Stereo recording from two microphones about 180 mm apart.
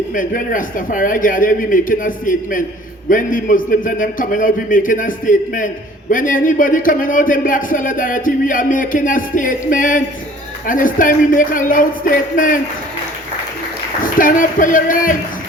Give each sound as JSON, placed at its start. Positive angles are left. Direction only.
{"t": 0.1, "sound": "a man's voice", "side_deg": 50}
{"t": 14.0, "sound": "a man's voice", "side_deg": 50}